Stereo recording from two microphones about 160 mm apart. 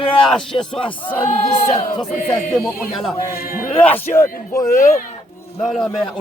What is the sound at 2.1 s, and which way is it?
Music, 55° left (ahead or behind).